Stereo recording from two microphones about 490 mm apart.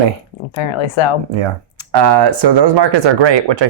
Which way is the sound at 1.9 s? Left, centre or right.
Right.